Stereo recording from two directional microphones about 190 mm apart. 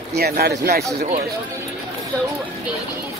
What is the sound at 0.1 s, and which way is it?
Speech, 55° right (ahead or behind).